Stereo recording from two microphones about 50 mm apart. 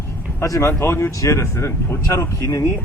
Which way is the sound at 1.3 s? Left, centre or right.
Left.